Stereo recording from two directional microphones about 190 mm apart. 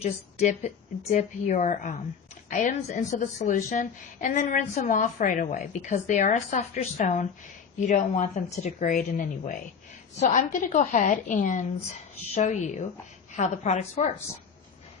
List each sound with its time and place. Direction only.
0.0 s a woman's voice: 35° left (ahead or behind)